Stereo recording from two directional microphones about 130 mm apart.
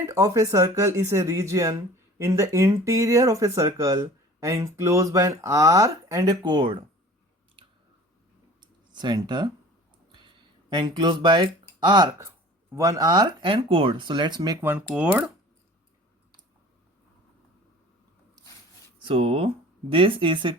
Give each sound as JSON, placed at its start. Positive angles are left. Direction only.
{"t": 0.0, "sound": "speech", "side_deg": -25}
{"t": 8.6, "sound": "a sound", "side_deg": -35}
{"t": 10.8, "sound": "speech", "side_deg": -35}
{"t": 14.6, "sound": "speech", "side_deg": -15}
{"t": 19.0, "sound": "speech", "side_deg": -45}